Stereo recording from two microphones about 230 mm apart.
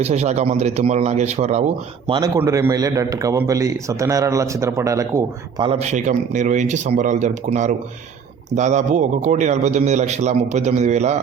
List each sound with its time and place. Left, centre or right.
0.0 s a man's voice: right
5.8 s a man's voice: right